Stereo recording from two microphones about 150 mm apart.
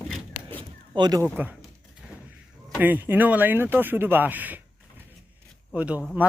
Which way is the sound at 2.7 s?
10° right (ahead or behind).